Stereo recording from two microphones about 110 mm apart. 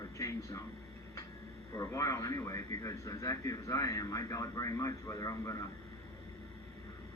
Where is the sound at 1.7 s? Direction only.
30° left (ahead or behind).